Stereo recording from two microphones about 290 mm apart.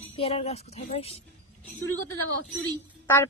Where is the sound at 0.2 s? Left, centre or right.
Centre.